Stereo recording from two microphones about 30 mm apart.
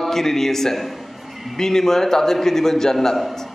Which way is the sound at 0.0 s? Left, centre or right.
Centre.